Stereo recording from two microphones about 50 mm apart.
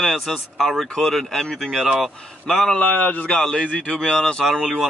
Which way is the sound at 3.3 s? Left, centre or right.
Centre.